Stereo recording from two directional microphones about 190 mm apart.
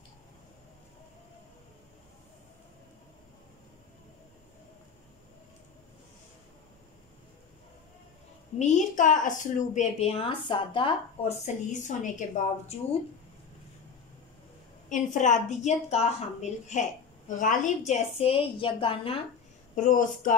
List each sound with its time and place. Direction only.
8.5 s a woman's voice: 40° left (ahead or behind)
14.9 s a woman's voice: 40° left (ahead or behind)
19.7 s a woman's voice: 40° left (ahead or behind)